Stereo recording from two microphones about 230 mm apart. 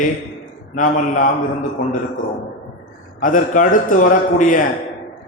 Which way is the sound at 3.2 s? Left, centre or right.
Left.